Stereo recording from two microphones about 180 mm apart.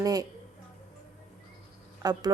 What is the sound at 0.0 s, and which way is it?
Speech, 20° right (ahead or behind).